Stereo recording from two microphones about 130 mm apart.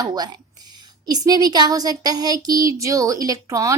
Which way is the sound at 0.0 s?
30° right (ahead or behind).